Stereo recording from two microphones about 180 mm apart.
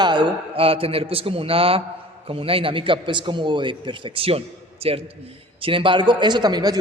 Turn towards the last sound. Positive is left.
turn(degrees=-20)  # may be behind; listen again after turning